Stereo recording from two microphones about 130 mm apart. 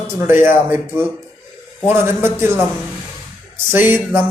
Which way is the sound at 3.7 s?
15° right (ahead or behind).